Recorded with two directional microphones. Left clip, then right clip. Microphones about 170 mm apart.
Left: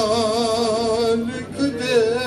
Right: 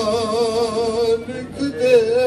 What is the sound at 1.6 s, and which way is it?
Music, 35° left (ahead or behind).